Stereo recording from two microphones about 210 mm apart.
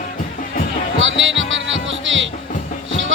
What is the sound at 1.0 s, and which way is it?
Music, 65° right (ahead or behind).